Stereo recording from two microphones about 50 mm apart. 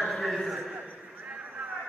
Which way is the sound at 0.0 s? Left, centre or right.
Centre.